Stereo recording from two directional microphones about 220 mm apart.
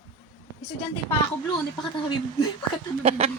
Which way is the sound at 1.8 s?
20° left (ahead or behind).